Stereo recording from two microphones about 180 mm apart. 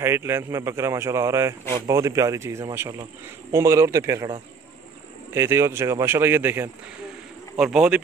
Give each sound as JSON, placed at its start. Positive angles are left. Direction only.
{"t": 0.0, "sound": "speech", "side_deg": -15}
{"t": 5.3, "sound": "speech", "side_deg": -15}